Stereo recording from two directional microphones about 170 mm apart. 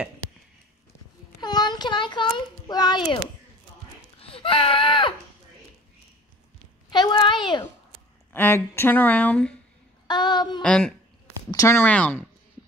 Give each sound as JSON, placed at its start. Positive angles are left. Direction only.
{"t": 1.4, "sound": "a sound", "side_deg": 25}
{"t": 4.2, "sound": "a sound", "side_deg": 30}
{"t": 6.9, "sound": "a child's voice", "side_deg": 25}
{"t": 8.3, "sound": "speech", "side_deg": 15}
{"t": 10.0, "sound": "a woman's voice", "side_deg": 25}
{"t": 10.6, "sound": "a woman's voice", "side_deg": 5}